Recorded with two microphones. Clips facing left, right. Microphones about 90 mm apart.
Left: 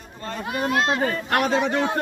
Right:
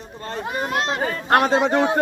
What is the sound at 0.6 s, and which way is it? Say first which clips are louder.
Speech: left 2 dB; 25° right (ahead or behind).